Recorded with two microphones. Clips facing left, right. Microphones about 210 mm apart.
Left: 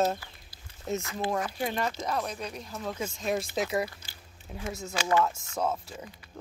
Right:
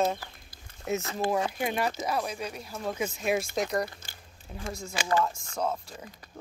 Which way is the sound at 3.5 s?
5° left (ahead or behind).